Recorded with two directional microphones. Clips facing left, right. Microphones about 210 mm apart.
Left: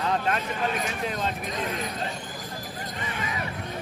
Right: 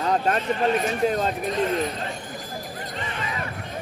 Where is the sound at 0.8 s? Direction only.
40° right (ahead or behind).